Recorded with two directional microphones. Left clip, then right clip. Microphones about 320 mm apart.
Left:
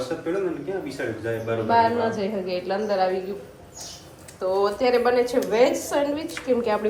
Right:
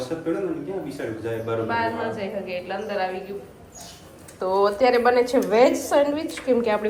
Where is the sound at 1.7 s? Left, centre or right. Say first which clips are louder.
Left 9 dB; centre.